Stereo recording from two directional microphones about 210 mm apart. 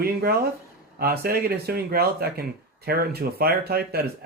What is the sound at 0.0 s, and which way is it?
Speech, 45° right (ahead or behind).